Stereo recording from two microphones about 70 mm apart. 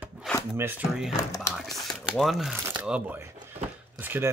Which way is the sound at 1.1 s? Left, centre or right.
Left.